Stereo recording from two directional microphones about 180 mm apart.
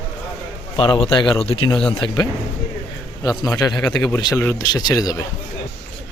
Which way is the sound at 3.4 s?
20° left (ahead or behind).